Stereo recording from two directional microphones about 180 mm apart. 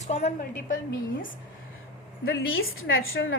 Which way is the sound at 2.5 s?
90° left.